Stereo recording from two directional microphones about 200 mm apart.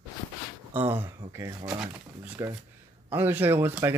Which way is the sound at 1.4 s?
15° right (ahead or behind).